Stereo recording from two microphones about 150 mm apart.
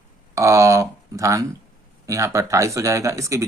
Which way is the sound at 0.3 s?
20° right (ahead or behind).